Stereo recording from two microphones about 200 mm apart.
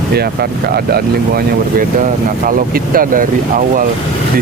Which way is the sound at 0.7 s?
50° right (ahead or behind).